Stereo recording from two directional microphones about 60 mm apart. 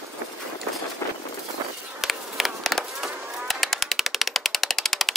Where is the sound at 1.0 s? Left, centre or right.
Left.